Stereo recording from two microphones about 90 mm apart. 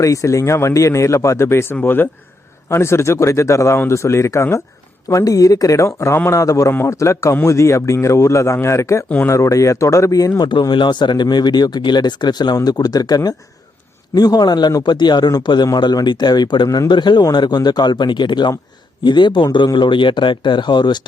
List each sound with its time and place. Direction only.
0.0 s speech: 35° left (ahead or behind)
9.0 s speech: 20° left (ahead or behind)
9.3 s speech: 35° left (ahead or behind)
10.5 s speech: 60° left (ahead or behind)
16.6 s speech: 35° left (ahead or behind)
16.9 s speech: 55° left (ahead or behind)